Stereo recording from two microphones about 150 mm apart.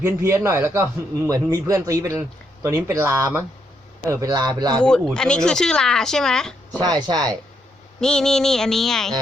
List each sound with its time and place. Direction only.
0.0 s a man's voice: 20° right (ahead or behind)
4.8 s speech: 5° left (ahead or behind)
6.7 s a man's voice: 30° right (ahead or behind)
8.0 s speech: 5° left (ahead or behind)